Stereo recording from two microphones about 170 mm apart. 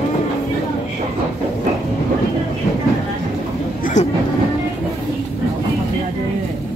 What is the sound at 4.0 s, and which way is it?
Speech, 45° left (ahead or behind).